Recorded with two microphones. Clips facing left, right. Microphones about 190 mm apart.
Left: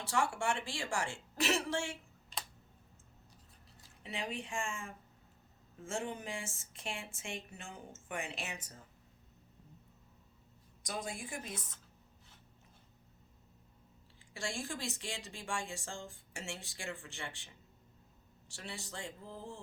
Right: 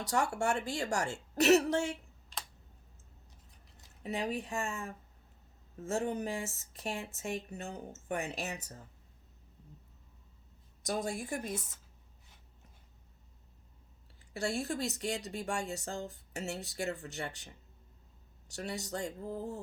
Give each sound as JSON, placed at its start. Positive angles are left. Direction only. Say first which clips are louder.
{"t": 0.0, "sound": "speech", "louder": "right 3 dB", "side_deg": -40}
{"t": 2.3, "sound": "computer keyboard", "louder": "even", "side_deg": 0}
{"t": 4.0, "sound": "speech", "louder": "right 6 dB", "side_deg": -40}
{"t": 10.8, "sound": "a woman's voice", "louder": "right 7 dB", "side_deg": -45}
{"t": 14.3, "sound": "speech", "louder": "right 7 dB", "side_deg": -40}